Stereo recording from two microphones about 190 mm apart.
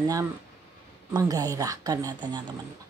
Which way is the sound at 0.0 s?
20° right (ahead or behind).